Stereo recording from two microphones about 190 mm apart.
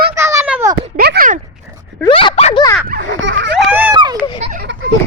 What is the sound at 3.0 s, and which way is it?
Children playing, 80° right.